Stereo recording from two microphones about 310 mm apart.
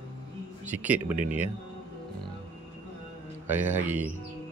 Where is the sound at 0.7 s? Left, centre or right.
Centre.